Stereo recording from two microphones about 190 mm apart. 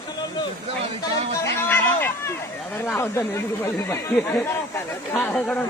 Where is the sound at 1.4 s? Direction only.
10° left (ahead or behind).